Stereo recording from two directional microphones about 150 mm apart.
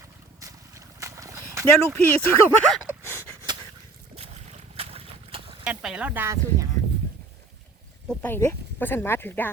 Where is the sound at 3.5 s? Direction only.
30° right (ahead or behind).